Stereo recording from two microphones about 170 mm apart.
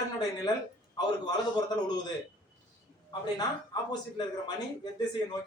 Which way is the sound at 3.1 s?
25° left (ahead or behind).